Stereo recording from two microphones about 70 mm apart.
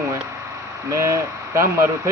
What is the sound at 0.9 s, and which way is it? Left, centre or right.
Speech, right.